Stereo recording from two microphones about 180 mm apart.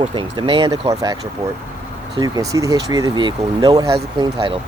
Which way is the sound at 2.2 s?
20° right (ahead or behind).